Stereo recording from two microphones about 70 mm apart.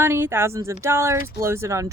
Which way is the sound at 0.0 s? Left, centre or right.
Right.